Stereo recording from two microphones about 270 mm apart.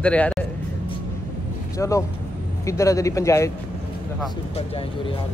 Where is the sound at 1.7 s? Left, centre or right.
Centre.